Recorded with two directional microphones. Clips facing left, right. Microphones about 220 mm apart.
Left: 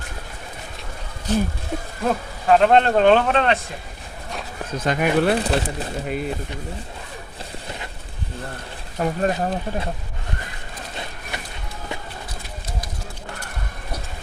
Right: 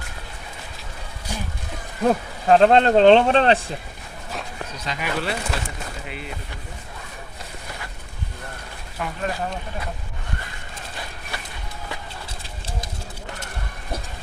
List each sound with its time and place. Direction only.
1.3 s speech: 10° right (ahead or behind)
2.5 s speech: 30° right (ahead or behind)
4.8 s speech: 50° left (ahead or behind)
5.4 s speech: 35° left (ahead or behind)
9.0 s speech: 40° left (ahead or behind)
12.4 s a sound: 30° right (ahead or behind)